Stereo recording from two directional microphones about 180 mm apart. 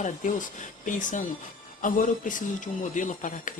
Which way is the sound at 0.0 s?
45° left (ahead or behind).